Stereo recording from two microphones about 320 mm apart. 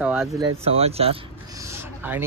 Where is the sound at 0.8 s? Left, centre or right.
Centre.